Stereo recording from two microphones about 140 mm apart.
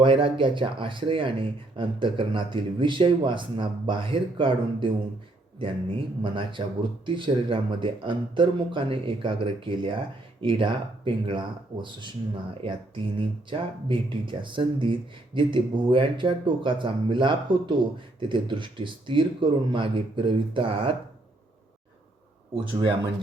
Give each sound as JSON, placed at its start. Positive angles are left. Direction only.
{"t": 0.0, "sound": "speech", "side_deg": -35}